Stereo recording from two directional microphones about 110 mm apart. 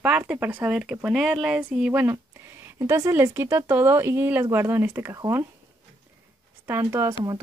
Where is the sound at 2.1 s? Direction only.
25° right (ahead or behind).